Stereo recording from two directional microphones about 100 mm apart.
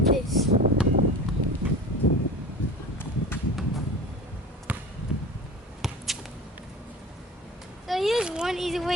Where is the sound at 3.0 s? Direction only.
20° left (ahead or behind).